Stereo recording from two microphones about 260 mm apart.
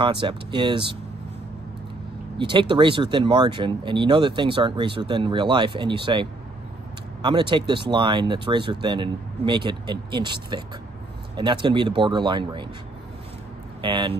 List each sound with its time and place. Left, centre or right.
0.0 s speech: centre
2.3 s speech: centre
13.7 s speech: centre